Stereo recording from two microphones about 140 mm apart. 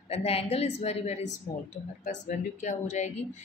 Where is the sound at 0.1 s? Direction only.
45° left (ahead or behind).